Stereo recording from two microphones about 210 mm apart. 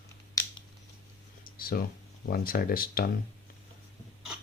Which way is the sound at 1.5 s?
45° left (ahead or behind).